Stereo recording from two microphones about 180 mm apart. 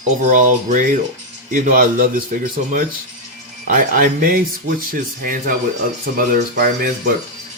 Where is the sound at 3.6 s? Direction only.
50° right (ahead or behind).